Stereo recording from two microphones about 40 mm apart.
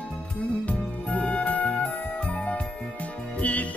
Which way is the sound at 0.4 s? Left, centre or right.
Left.